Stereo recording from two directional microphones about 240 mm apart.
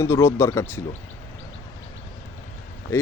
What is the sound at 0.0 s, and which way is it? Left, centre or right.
Speech, centre.